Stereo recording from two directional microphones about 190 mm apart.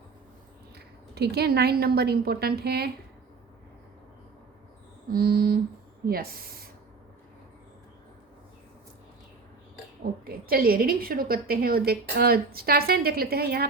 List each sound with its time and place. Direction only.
1.1 s a woman's voice: 60° right (ahead or behind)
5.1 s a woman's voice: 50° right (ahead or behind)
10.2 s a woman's voice: 50° right (ahead or behind)